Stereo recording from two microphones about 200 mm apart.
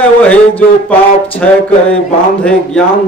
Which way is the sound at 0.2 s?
10° left (ahead or behind).